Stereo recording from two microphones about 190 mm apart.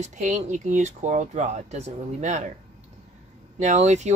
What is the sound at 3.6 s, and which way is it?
Speech, 35° right (ahead or behind).